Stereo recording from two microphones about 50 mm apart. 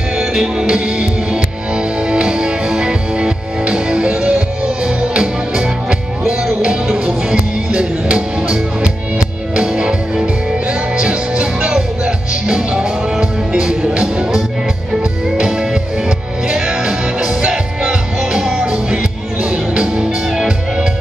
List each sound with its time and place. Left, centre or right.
0.3 s music: centre